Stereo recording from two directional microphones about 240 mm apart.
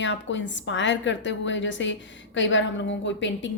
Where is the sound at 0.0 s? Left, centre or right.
Left.